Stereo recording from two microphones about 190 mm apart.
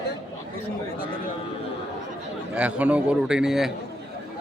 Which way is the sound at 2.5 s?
5° right (ahead or behind).